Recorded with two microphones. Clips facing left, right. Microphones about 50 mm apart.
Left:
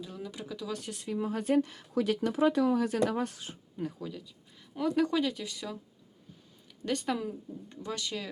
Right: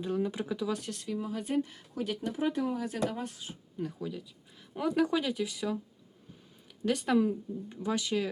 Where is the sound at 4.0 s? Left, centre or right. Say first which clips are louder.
Right 2 dB; centre.